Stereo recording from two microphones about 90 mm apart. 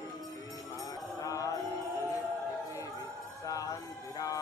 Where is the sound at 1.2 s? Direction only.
40° left (ahead or behind).